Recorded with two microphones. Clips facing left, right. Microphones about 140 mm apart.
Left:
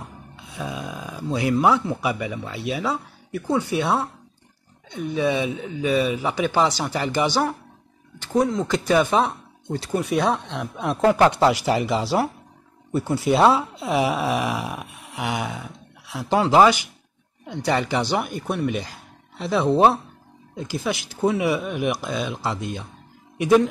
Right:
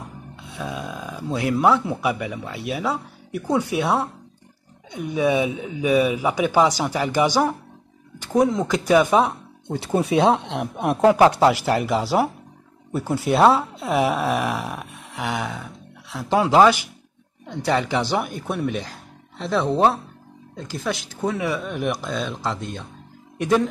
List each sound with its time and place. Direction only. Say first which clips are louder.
0.5 s speech: even; centre (ahead or behind)
9.8 s speech: right 3 dB; 25° right (ahead or behind)
10.3 s speech: right 4 dB; 60° right (ahead or behind)
11.0 s speech: right 2 dB; 15° right (ahead or behind); by 23.7 s 5° left (ahead or behind)